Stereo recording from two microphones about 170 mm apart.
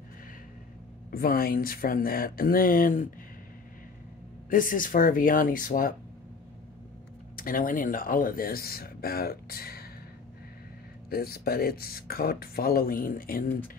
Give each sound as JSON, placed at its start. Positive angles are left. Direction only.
{"t": 1.1, "sound": "speech", "side_deg": 60}
{"t": 4.5, "sound": "speech", "side_deg": 55}
{"t": 7.3, "sound": "speech", "side_deg": 55}
{"t": 11.1, "sound": "speech", "side_deg": 65}